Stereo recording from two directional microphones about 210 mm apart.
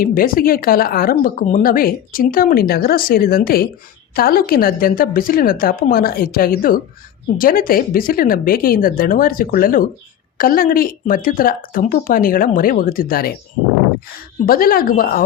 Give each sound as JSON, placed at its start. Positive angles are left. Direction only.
{"t": 0.0, "sound": "speech", "side_deg": 45}
{"t": 14.4, "sound": "speech", "side_deg": 45}